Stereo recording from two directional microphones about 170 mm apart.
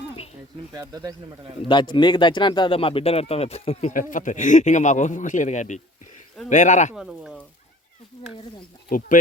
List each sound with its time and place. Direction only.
0.7 s speech: 20° right (ahead or behind)
1.6 s a man's voice: 30° left (ahead or behind); by 6.9 s 45° left (ahead or behind)
6.9 s speech: 5° right (ahead or behind)
8.1 s speech: 30° left (ahead or behind)
8.9 s a man's voice: 50° left (ahead or behind)